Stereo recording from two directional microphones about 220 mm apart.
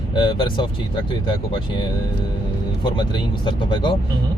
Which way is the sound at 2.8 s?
20° left (ahead or behind).